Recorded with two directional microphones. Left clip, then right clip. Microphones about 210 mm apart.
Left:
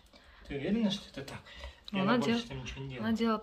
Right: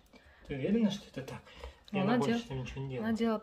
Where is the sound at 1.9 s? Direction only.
10° right (ahead or behind).